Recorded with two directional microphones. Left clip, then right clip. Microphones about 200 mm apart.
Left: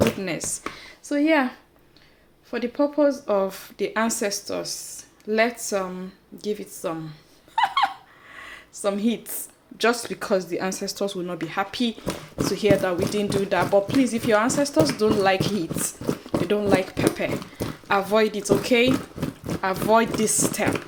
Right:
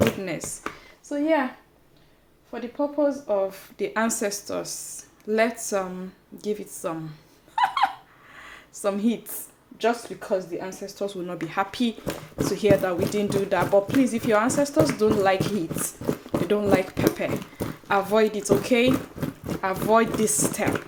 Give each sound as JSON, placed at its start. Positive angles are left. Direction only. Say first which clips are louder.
{"t": 0.0, "sound": "speech", "louder": "left 1 dB", "side_deg": 5}
{"t": 1.1, "sound": "speech", "louder": "left 2 dB", "side_deg": 30}
{"t": 2.5, "sound": "speech", "louder": "left 4 dB", "side_deg": 35}
{"t": 3.8, "sound": "speech", "louder": "left 1 dB", "side_deg": 5}
{"t": 7.5, "sound": "squeak", "louder": "left 1 dB", "side_deg": 0}
{"t": 8.4, "sound": "a sound", "louder": "left 1 dB", "side_deg": 0}
{"t": 9.7, "sound": "speech", "louder": "left 2 dB", "side_deg": 25}